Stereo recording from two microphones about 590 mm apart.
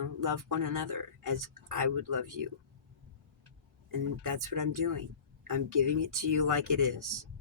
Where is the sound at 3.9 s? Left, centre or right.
Right.